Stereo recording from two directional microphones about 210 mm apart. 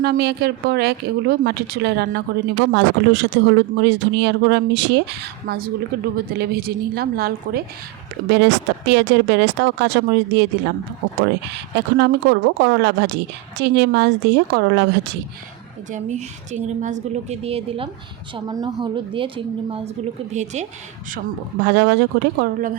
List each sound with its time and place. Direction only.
0.0 s speech: 50° right (ahead or behind)
15.9 s a woman's voice: 35° right (ahead or behind)
21.6 s speech: 55° right (ahead or behind)